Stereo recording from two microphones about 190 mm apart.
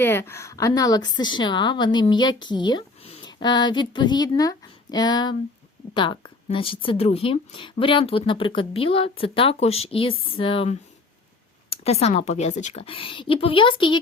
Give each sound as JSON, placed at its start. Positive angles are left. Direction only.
{"t": 0.0, "sound": "a woman's voice", "side_deg": 10}